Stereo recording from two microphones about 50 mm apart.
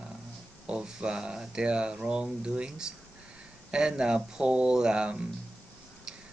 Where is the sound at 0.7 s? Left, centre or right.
Centre.